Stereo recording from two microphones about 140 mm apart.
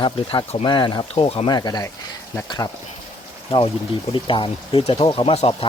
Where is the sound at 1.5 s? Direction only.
30° left (ahead or behind).